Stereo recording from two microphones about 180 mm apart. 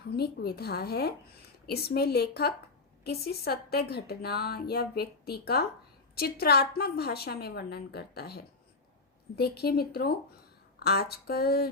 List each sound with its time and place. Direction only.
0.2 s speech: 60° left (ahead or behind)